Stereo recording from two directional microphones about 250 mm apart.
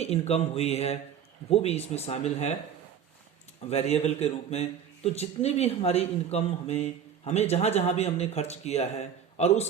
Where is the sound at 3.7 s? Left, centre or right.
Left.